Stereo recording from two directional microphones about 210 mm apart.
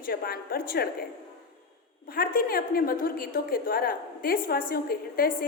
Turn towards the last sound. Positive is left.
turn(degrees=45)  # may be behind; listen again after turning